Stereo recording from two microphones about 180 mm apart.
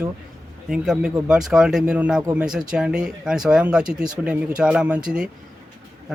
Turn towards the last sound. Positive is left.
turn(degrees=-5)  # may be behind; listen again after turning